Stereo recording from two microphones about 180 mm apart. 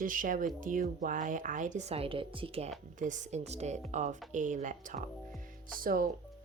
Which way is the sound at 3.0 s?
45° right (ahead or behind).